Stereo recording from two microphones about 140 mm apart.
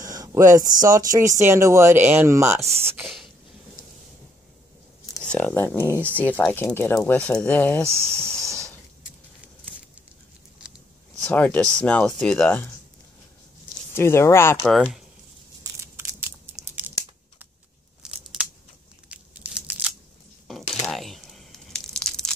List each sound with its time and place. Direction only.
0.0 s speech: 25° right (ahead or behind)
3.0 s a sound: centre (ahead or behind)
5.2 s speech: 10° left (ahead or behind)
5.9 s speech: 15° right (ahead or behind)
6.1 s speech: 10° left (ahead or behind)
7.8 s speech: 20° right (ahead or behind)
8.3 s snort: 5° left (ahead or behind)
11.2 s speech: 10° left (ahead or behind)
13.9 s speech: 15° left (ahead or behind)
14.7 s speech: centre (ahead or behind)
15.6 s tearing: 20° right (ahead or behind)
18.0 s scissors: 5° right (ahead or behind)
19.0 s crunch: 10° right (ahead or behind)
20.8 s crumpling: centre (ahead or behind)